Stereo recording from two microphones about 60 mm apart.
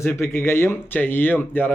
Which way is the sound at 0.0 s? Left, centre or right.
Left.